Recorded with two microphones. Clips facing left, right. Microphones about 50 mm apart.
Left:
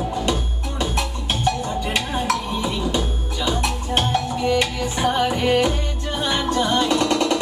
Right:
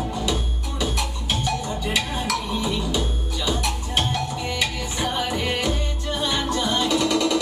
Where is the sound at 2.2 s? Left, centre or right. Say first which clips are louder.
Left 2 dB; left.